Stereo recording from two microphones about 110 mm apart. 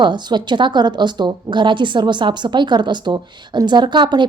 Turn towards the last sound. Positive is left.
turn(degrees=-45)  # may be behind; listen again after turning